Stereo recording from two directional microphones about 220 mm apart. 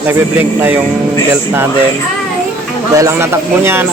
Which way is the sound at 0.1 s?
10° right (ahead or behind).